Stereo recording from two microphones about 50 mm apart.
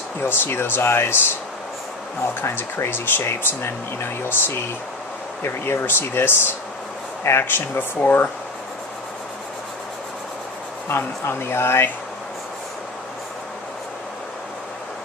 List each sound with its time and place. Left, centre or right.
0.2 s speech: left
2.4 s speech: left
10.8 s speech: left